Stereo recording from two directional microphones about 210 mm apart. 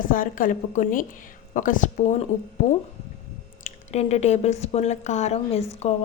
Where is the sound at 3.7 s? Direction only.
30° left (ahead or behind).